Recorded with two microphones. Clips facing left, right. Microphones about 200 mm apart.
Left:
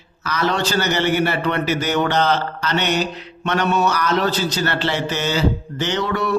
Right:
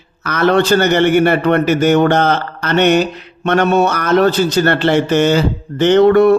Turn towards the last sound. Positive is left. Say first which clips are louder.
# right 13 dB
turn(degrees=-55)  # may be behind; listen again after turning